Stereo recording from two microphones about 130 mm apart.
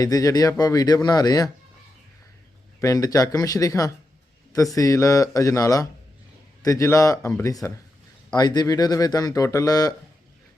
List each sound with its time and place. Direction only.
0.0 s speech: 30° left (ahead or behind)
2.8 s speech: 25° left (ahead or behind)